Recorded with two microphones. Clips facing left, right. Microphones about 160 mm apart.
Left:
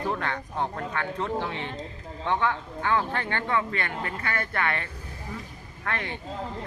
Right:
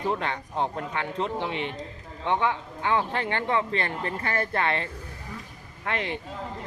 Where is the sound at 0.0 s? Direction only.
20° right (ahead or behind).